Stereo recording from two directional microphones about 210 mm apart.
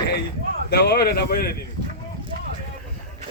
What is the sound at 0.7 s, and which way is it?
Speech, 50° left (ahead or behind).